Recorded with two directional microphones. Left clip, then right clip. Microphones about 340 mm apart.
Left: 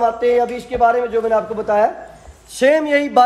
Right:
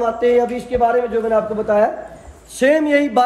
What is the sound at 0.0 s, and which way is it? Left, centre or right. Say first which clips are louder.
A man's voice: even; left.